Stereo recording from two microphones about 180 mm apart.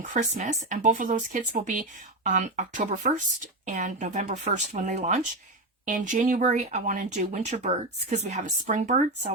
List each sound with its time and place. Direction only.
0.1 s speech: 45° right (ahead or behind)